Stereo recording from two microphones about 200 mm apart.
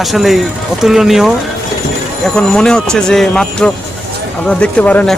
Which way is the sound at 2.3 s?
5° left (ahead or behind).